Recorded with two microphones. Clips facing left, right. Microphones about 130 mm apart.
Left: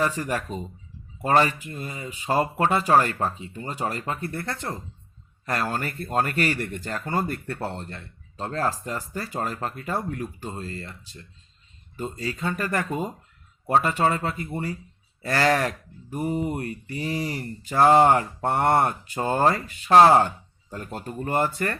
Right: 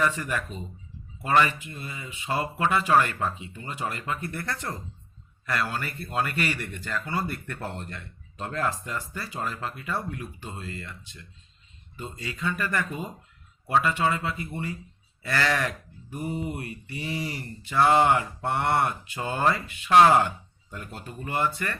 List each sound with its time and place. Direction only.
0.0 s speech: 35° left (ahead or behind)
5.5 s speech: 40° left (ahead or behind)